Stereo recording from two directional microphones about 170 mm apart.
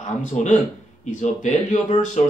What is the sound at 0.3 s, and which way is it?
Speech, 45° left (ahead or behind).